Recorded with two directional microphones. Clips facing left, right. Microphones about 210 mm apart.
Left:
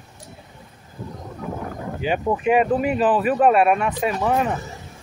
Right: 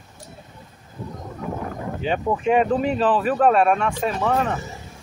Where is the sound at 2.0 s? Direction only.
5° left (ahead or behind).